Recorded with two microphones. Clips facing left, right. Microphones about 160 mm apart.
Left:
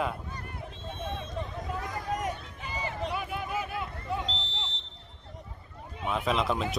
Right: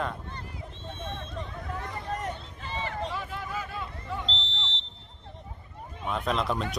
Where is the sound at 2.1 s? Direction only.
10° left (ahead or behind).